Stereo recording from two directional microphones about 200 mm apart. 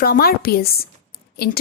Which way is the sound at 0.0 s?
50° left (ahead or behind).